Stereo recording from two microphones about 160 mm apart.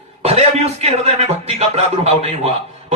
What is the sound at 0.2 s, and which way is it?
A man's voice, 40° right (ahead or behind).